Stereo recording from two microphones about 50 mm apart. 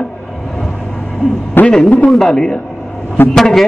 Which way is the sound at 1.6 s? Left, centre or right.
Left.